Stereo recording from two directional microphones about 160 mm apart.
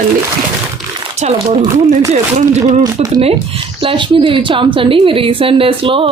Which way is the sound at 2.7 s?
50° right (ahead or behind).